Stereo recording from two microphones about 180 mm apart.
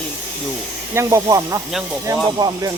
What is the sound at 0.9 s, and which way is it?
Speech, 20° right (ahead or behind).